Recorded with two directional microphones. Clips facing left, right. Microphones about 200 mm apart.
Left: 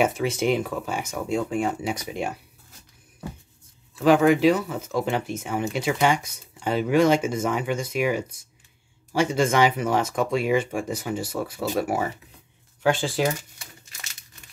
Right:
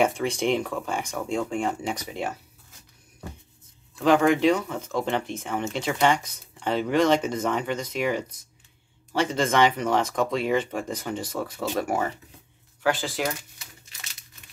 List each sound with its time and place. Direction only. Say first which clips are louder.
0.0 s speech: left 1 dB; 5° left (ahead or behind)
3.9 s speech: left 2 dB; 5° left (ahead or behind)
12.8 s speech: left 3 dB; 30° left (ahead or behind)